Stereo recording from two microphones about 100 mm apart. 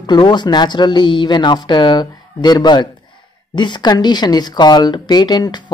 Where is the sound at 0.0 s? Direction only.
45° left (ahead or behind).